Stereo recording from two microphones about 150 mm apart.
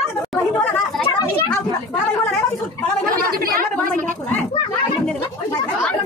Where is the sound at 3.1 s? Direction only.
75° right (ahead or behind).